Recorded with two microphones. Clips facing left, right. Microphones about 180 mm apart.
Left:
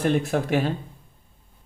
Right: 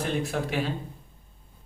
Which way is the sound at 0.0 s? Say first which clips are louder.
Left 6 dB; 50° left (ahead or behind).